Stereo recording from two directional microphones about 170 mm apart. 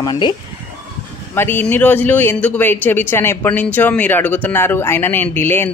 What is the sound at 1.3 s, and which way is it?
Speech, 10° left (ahead or behind).